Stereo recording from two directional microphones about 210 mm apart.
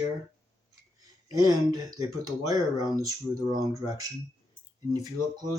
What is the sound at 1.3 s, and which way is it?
Speech, 15° right (ahead or behind).